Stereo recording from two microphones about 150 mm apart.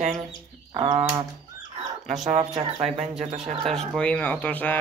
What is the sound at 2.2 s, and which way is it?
Speech, 45° right (ahead or behind).